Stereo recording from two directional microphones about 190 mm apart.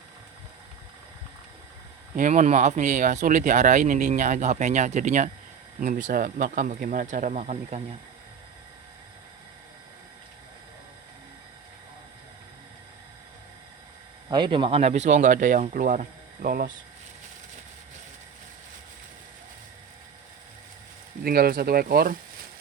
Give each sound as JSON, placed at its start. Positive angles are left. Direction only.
{"t": 2.1, "sound": "speech", "side_deg": -40}
{"t": 14.3, "sound": "speech", "side_deg": -25}
{"t": 21.2, "sound": "speech", "side_deg": -50}